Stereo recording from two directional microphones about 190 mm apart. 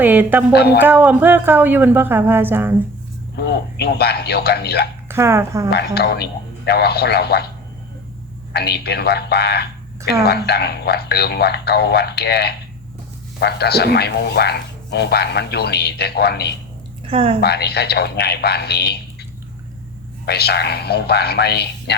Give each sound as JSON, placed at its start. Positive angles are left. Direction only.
{"t": 0.0, "sound": "a woman's voice", "side_deg": -10}
{"t": 0.5, "sound": "a man's voice", "side_deg": 55}
{"t": 0.8, "sound": "a woman's voice", "side_deg": -10}
{"t": 3.3, "sound": "a man's voice", "side_deg": 60}
{"t": 5.0, "sound": "speech", "side_deg": -15}
{"t": 5.7, "sound": "a man's voice", "side_deg": 55}
{"t": 8.5, "sound": "a man's voice", "side_deg": 60}
{"t": 17.1, "sound": "speech", "side_deg": -30}
{"t": 17.4, "sound": "a man's voice", "side_deg": 60}
{"t": 20.2, "sound": "a man's voice", "side_deg": 60}